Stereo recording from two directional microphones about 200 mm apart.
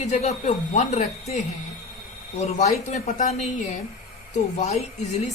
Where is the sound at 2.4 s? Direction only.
35° left (ahead or behind).